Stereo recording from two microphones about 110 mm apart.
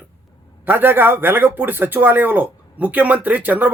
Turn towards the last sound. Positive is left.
turn(degrees=-15)  # may be behind; listen again after turning